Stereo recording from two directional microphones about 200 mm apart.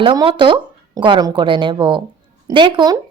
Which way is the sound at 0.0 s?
25° right (ahead or behind).